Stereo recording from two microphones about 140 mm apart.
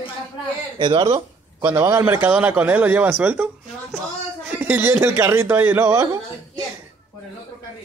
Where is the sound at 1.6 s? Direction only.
15° right (ahead or behind).